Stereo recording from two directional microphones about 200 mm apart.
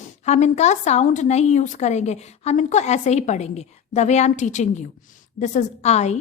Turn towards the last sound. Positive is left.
turn(degrees=35)  # may be behind; listen again after turning